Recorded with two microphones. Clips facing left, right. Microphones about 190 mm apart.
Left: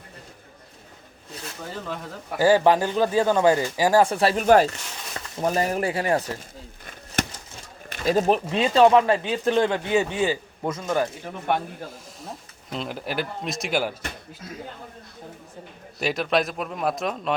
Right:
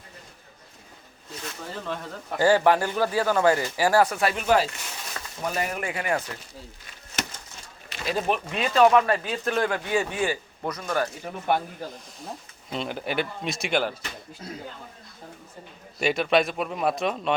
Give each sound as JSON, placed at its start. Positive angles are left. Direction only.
{"t": 1.8, "sound": "speech", "side_deg": 5}
{"t": 2.5, "sound": "speech", "side_deg": 15}
{"t": 4.1, "sound": "speech", "side_deg": 30}
{"t": 4.4, "sound": "speech", "side_deg": 50}
{"t": 5.4, "sound": "speech", "side_deg": 35}
{"t": 7.2, "sound": "a sound", "side_deg": 50}
{"t": 7.9, "sound": "speech", "side_deg": 45}
{"t": 11.4, "sound": "speech", "side_deg": 0}
{"t": 16.0, "sound": "speech", "side_deg": 0}